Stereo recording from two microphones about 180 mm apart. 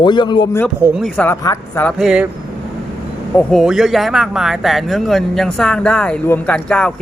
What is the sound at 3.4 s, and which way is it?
Speech, 5° left (ahead or behind).